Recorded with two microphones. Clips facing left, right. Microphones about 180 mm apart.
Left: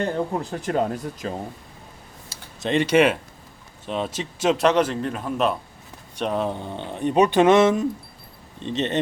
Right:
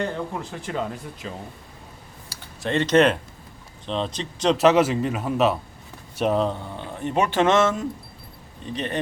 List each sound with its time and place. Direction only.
0.0 s speech: 40° left (ahead or behind)
2.3 s speech: 20° left (ahead or behind); by 6.4 s 5° right (ahead or behind)
6.4 s speech: 15° left (ahead or behind)